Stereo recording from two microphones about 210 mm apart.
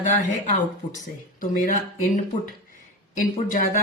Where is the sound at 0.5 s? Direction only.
40° left (ahead or behind).